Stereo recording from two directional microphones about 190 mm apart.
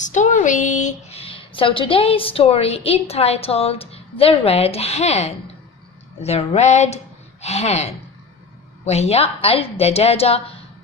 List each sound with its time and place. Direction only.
0.0 s a woman's voice: 40° left (ahead or behind)